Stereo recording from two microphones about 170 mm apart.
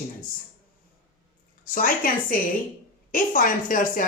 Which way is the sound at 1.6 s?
55° left (ahead or behind).